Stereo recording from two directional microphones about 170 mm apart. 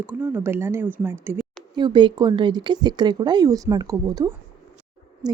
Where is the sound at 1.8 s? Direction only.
30° right (ahead or behind).